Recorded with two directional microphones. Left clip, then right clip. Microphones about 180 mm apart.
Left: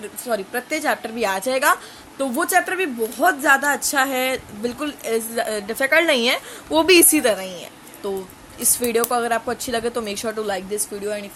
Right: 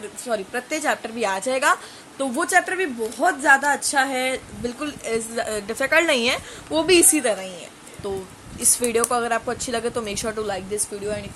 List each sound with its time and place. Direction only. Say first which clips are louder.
0.3 s a woman's voice: left 2 dB; 10° left (ahead or behind)
6.7 s a woman's voice: left 3 dB; 25° left (ahead or behind)